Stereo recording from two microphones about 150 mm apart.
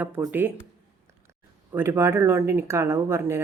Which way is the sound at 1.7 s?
15° right (ahead or behind).